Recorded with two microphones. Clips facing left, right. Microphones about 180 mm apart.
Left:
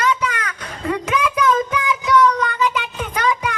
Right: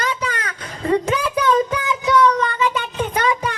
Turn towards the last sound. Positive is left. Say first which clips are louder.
# right 1 dB
turn(degrees=-30)  # may be behind; listen again after turning